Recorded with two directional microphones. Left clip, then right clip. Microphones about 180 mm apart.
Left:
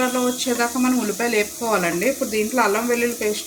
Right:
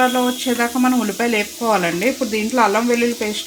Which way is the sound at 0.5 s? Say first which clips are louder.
Right 3 dB; 50° right (ahead or behind).